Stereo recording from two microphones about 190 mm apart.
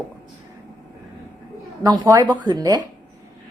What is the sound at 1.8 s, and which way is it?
Speech, 20° right (ahead or behind).